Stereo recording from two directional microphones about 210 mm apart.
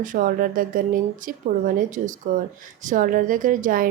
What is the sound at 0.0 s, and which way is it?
A woman's voice, 40° right (ahead or behind).